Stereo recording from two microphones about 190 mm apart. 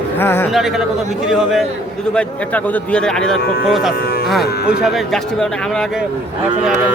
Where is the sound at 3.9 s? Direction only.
55° left (ahead or behind).